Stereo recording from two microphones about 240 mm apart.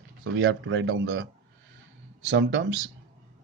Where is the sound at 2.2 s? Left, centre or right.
Right.